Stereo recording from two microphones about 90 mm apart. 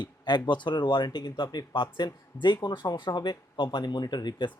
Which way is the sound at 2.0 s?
55° left (ahead or behind).